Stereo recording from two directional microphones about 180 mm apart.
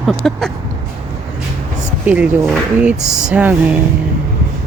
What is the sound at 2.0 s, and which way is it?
Speech, 10° right (ahead or behind).